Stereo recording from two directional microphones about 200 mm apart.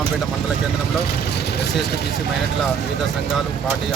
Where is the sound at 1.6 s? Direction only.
55° left (ahead or behind).